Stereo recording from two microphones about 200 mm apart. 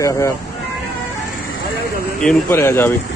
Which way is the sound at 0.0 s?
15° left (ahead or behind).